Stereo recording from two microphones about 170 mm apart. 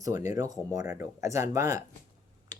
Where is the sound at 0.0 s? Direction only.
20° right (ahead or behind).